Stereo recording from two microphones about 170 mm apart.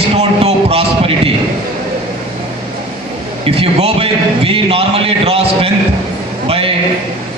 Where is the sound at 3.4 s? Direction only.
35° right (ahead or behind).